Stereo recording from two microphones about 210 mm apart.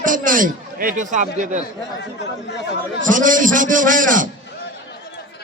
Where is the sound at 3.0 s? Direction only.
40° right (ahead or behind).